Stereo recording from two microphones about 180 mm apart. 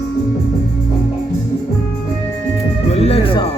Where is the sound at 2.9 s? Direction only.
35° left (ahead or behind).